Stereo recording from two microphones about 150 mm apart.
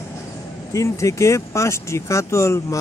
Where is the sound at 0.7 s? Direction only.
20° left (ahead or behind).